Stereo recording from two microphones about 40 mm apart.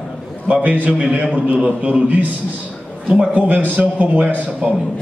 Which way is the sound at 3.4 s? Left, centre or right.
Right.